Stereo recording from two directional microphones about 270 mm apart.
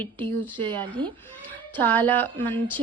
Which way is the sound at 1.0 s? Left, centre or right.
Centre.